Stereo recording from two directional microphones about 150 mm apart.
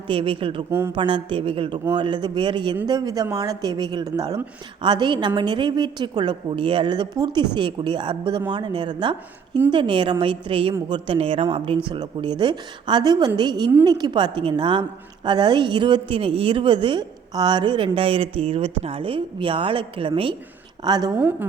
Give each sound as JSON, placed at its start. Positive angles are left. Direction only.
{"t": 0.1, "sound": "a woman's voice", "side_deg": -35}
{"t": 21.2, "sound": "a woman's voice", "side_deg": -10}